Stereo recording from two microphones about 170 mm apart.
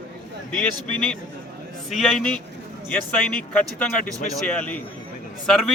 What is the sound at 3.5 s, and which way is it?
A man's voice, 5° left (ahead or behind).